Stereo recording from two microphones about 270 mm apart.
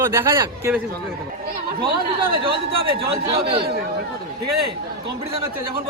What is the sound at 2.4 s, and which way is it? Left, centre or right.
Speech, centre.